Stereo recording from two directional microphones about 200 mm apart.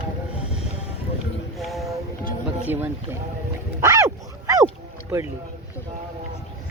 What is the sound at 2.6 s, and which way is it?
Speech, 10° right (ahead or behind).